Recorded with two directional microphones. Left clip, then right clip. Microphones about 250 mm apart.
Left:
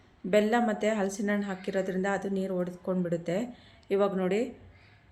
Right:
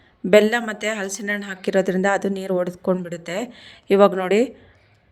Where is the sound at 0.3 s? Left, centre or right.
Right.